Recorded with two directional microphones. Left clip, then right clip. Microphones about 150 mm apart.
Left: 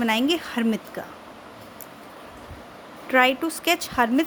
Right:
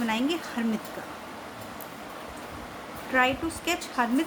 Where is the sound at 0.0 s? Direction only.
70° left (ahead or behind).